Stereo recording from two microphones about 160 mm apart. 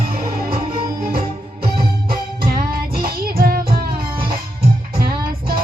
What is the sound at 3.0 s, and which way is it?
Music, 70° right (ahead or behind).